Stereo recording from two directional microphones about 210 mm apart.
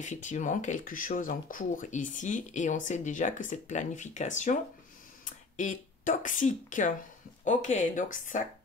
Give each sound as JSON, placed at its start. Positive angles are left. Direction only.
{"t": 0.0, "sound": "speech", "side_deg": 35}